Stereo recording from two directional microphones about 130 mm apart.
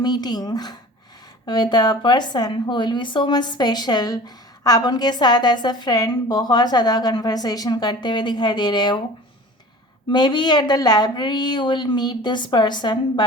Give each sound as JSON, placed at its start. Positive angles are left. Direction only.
{"t": 0.0, "sound": "a woman's voice", "side_deg": 30}
{"t": 10.1, "sound": "a woman's voice", "side_deg": 35}